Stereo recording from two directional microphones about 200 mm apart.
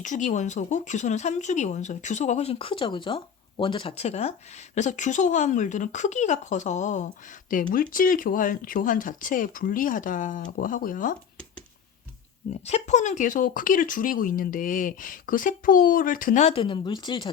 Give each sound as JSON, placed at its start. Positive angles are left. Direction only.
{"t": 0.0, "sound": "speech", "side_deg": 40}
{"t": 12.6, "sound": "speech", "side_deg": 35}